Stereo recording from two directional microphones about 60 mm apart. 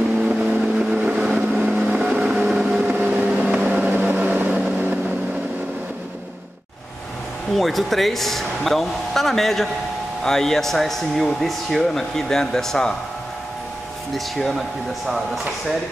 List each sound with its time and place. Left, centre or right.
0.3 s vehicle: centre
7.5 s speech: centre
14.1 s speech: centre